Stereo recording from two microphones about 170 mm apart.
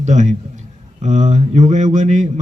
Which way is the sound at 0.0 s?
45° right (ahead or behind).